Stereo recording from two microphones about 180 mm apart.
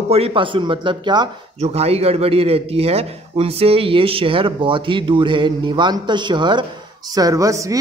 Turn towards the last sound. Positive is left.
turn(degrees=-15)  # may be behind; listen again after turning